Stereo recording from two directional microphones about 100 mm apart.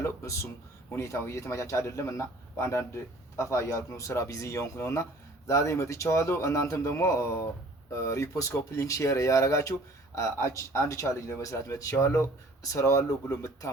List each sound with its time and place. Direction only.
0.0 s speech: 25° left (ahead or behind)